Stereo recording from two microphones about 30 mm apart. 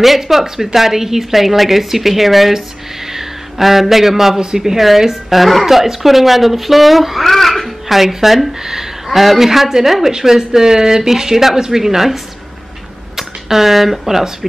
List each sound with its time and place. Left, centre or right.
0.0 s a woman's voice: centre
5.3 s speech: centre
8.0 s a woman's voice: centre